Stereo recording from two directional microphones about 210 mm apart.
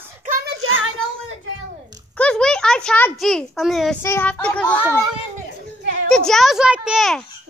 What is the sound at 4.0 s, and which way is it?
Speech, 10° left (ahead or behind).